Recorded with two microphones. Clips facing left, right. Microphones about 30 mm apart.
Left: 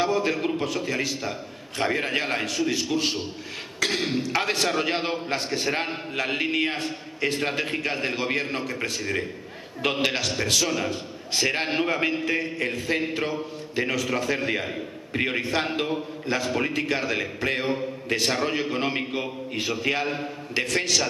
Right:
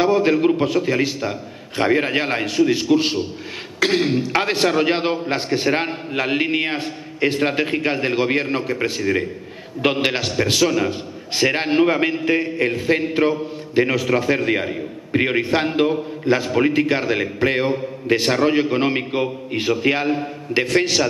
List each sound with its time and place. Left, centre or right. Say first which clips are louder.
0.0 s a man's voice: right 8 dB; right